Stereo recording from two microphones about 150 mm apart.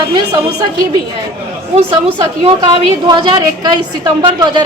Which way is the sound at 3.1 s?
30° right (ahead or behind).